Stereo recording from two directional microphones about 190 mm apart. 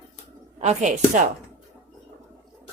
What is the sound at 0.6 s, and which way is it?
Speech, 35° right (ahead or behind).